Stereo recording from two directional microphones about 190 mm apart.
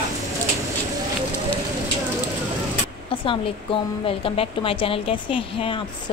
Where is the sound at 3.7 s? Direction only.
25° left (ahead or behind).